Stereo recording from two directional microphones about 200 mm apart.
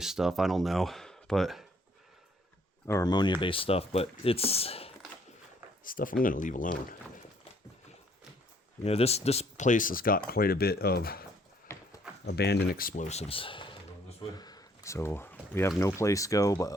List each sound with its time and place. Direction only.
0.0 s speech: centre (ahead or behind)
2.8 s speech: 15° left (ahead or behind)
5.8 s speech: 45° left (ahead or behind)
8.8 s speech: 30° left (ahead or behind)
14.2 s a sound: 20° left (ahead or behind)
15.9 s speech: 15° left (ahead or behind)